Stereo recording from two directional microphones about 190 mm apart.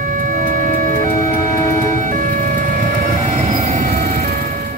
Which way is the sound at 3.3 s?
40° right (ahead or behind).